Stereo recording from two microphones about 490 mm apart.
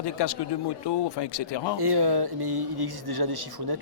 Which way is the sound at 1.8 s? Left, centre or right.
Right.